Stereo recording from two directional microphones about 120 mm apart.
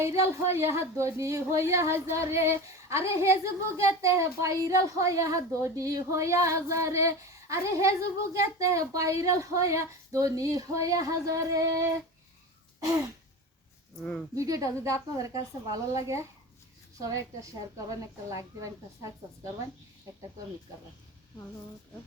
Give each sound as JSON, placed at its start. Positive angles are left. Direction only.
{"t": 0.0, "sound": "speech", "side_deg": -25}
{"t": 13.9, "sound": "speech", "side_deg": 10}
{"t": 14.3, "sound": "speech", "side_deg": -30}